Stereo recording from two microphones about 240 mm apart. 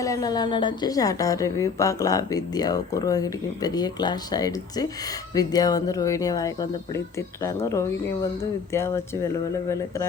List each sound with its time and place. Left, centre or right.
0.0 s a woman's voice: centre